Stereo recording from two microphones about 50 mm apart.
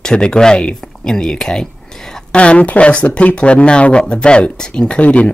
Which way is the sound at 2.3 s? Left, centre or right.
Left.